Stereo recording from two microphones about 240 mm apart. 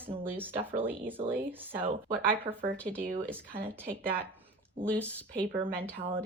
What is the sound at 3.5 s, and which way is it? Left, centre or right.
Speech, right.